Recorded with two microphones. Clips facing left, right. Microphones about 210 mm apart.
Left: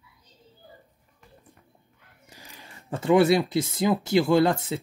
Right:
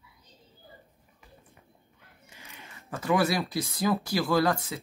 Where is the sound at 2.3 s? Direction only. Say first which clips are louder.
Left 2 dB; 35° left (ahead or behind).